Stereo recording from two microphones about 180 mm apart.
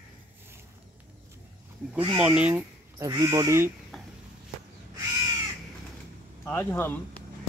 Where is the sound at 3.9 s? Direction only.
Centre (ahead or behind).